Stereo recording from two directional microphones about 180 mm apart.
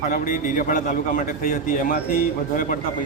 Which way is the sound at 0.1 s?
50° left (ahead or behind).